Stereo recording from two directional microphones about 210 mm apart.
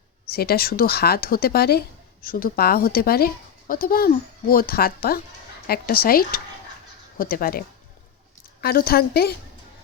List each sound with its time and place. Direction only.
0.3 s speech: 45° left (ahead or behind)
8.6 s speech: 45° left (ahead or behind)